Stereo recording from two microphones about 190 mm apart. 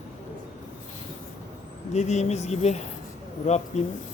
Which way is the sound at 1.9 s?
35° left (ahead or behind).